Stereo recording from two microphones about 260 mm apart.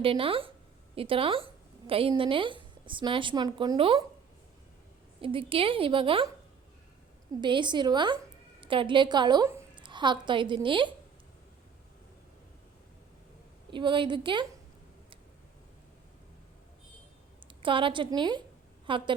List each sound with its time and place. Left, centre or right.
0.0 s a woman's voice: right
5.2 s a woman's voice: right
7.4 s a woman's voice: centre
13.7 s a woman's voice: centre
17.5 s a woman's voice: centre